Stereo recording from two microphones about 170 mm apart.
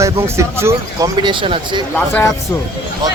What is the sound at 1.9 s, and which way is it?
Speech, 10° left (ahead or behind).